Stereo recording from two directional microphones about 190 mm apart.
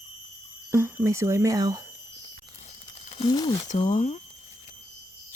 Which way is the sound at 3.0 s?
30° left (ahead or behind).